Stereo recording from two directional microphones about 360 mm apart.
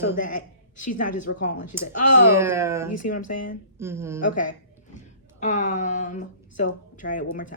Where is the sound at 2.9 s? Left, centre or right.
Left.